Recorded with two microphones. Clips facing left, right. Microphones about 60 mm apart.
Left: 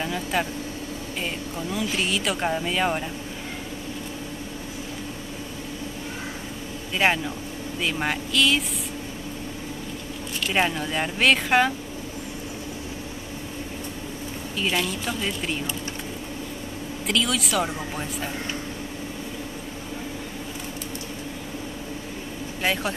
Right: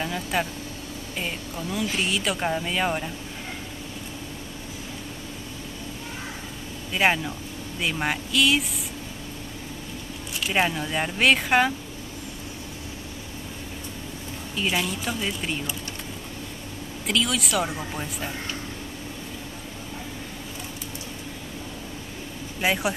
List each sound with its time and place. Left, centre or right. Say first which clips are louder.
0.0 s speech: left 1 dB; centre
6.9 s speech: even; centre
10.4 s speech: even; centre
14.6 s speech: even; centre
17.1 s speech: even; centre
22.6 s speech: right 1 dB; centre